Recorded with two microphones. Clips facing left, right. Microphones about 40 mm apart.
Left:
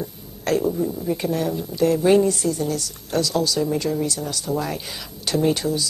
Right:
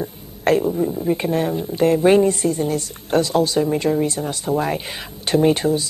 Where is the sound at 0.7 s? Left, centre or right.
Right.